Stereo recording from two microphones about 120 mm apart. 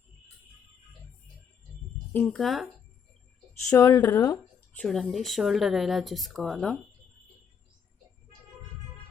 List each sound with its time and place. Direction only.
2.3 s speech: centre (ahead or behind)
3.7 s a woman's voice: 25° left (ahead or behind)
4.7 s speech: 5° left (ahead or behind)